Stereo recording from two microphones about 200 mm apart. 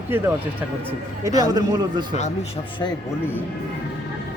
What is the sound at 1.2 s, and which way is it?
Speech, 20° right (ahead or behind).